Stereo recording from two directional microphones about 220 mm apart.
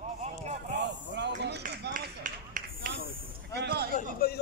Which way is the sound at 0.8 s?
50° right (ahead or behind).